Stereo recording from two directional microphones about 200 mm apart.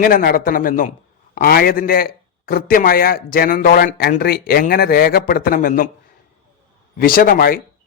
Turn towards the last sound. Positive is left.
turn(degrees=45)  # may be behind; listen again after turning